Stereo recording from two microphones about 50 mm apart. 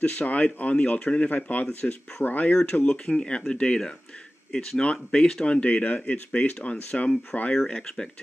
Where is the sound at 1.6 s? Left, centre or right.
Centre.